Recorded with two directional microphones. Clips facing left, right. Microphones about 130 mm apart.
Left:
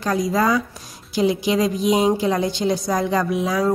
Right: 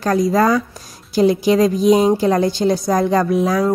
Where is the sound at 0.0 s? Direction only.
40° right (ahead or behind).